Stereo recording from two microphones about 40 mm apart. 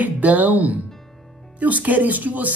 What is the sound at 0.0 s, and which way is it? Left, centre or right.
Speech, right.